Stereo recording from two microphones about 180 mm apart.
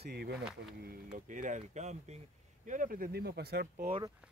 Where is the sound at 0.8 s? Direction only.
45° right (ahead or behind).